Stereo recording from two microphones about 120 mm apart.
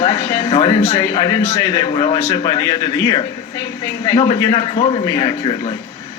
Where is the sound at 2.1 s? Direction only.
35° left (ahead or behind).